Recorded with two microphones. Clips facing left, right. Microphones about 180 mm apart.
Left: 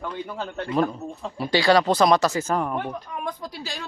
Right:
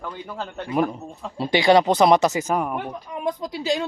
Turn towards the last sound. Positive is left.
turn(degrees=-20)  # may be behind; listen again after turning